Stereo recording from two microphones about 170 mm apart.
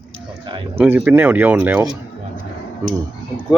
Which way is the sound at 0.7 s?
10° right (ahead or behind).